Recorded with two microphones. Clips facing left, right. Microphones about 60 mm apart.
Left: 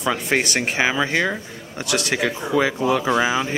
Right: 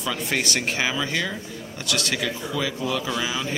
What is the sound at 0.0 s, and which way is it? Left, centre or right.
A man's voice, left.